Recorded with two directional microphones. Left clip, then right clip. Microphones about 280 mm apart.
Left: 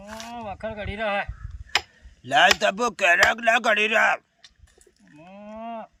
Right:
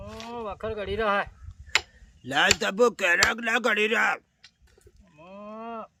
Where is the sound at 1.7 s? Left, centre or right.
Centre.